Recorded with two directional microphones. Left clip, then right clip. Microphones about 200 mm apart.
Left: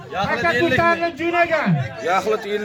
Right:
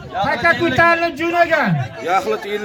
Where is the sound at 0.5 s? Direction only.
45° left (ahead or behind).